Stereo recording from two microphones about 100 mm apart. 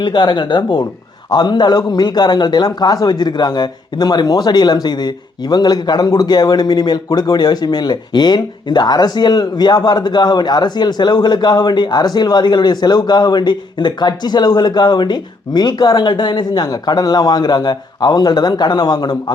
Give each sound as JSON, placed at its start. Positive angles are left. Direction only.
{"t": 0.0, "sound": "a man's voice", "side_deg": 50}